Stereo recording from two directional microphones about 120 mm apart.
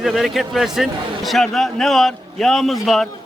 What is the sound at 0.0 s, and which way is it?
A man's voice, centre (ahead or behind).